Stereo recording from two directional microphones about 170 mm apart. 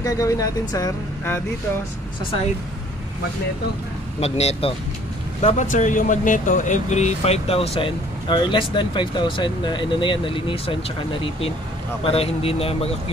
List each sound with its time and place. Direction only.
0.0 s speech: 20° left (ahead or behind)
4.2 s speech: 40° left (ahead or behind)